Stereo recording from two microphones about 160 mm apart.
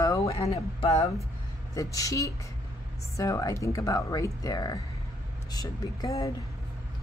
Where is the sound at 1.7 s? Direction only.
20° left (ahead or behind).